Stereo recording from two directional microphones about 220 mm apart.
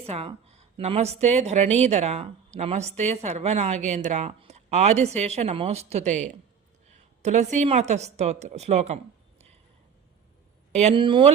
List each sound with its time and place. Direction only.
0.0 s speech: 25° right (ahead or behind)
10.7 s speech: 30° right (ahead or behind)